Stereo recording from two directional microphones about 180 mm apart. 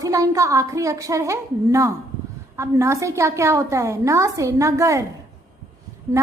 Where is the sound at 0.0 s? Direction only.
20° right (ahead or behind).